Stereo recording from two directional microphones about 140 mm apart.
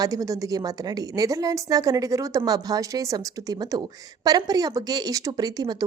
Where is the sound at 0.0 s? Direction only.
25° right (ahead or behind).